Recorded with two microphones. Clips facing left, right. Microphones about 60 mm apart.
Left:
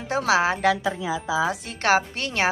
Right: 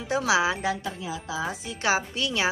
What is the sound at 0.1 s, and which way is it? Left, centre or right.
Speech, left.